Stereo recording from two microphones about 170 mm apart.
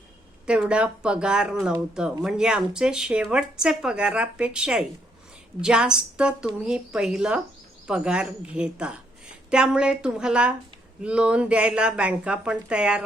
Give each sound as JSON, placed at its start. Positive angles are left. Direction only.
{"t": 0.4, "sound": "speech", "side_deg": -5}